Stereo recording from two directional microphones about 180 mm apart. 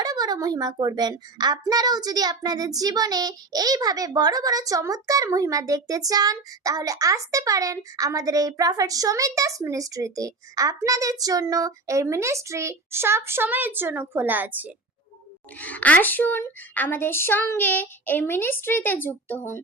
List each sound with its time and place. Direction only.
0.0 s a child's voice: 20° right (ahead or behind)
15.5 s a woman's voice: 10° left (ahead or behind)